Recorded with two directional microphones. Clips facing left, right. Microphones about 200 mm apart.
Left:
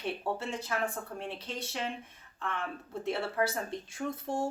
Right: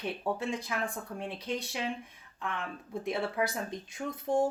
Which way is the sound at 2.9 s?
15° right (ahead or behind).